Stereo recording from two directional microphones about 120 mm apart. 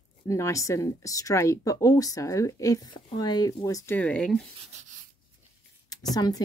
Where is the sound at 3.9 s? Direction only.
10° left (ahead or behind).